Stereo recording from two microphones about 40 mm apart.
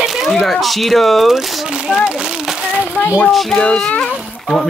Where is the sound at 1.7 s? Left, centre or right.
Right.